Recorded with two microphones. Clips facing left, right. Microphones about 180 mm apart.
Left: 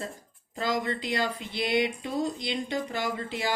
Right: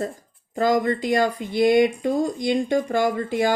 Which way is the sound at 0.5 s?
50° right (ahead or behind).